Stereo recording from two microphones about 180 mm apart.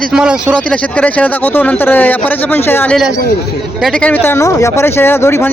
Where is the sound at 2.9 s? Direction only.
5° right (ahead or behind).